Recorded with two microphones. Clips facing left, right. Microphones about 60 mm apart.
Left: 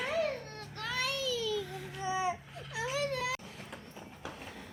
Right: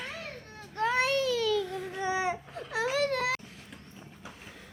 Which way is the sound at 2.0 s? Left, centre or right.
Right.